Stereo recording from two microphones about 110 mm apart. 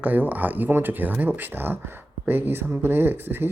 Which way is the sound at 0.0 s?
15° right (ahead or behind).